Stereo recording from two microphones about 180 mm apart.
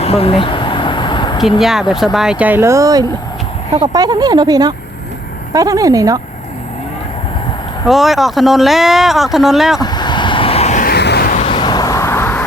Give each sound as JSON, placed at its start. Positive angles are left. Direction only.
{"t": 0.0, "sound": "a sound", "side_deg": 35}
{"t": 1.4, "sound": "speech", "side_deg": 0}
{"t": 7.9, "sound": "speech", "side_deg": 0}
{"t": 9.8, "sound": "vehicle", "side_deg": 25}
{"t": 10.8, "sound": "a sound", "side_deg": 65}
{"t": 11.3, "sound": "vehicle", "side_deg": 30}